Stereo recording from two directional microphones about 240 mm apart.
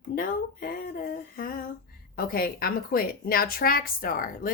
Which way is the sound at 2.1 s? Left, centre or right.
Left.